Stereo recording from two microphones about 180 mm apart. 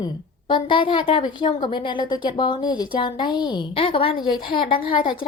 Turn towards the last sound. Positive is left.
turn(degrees=25)  # may be behind; listen again after turning